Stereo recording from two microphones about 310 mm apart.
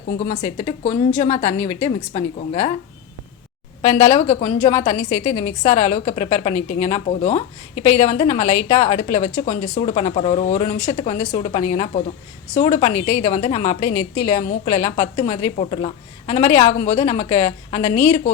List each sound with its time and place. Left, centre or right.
0.3 s a woman's voice: centre
3.8 s a woman's voice: left